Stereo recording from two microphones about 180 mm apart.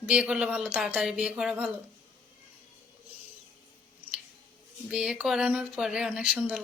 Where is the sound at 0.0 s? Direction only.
5° right (ahead or behind).